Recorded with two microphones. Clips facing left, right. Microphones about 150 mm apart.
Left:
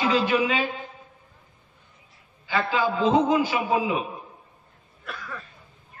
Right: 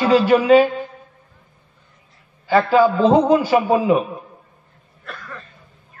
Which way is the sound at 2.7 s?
45° right (ahead or behind).